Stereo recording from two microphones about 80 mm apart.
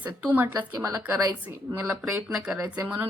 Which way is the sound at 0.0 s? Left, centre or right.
Right.